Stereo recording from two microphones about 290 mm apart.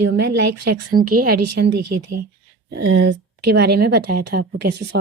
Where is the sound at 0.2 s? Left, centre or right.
Right.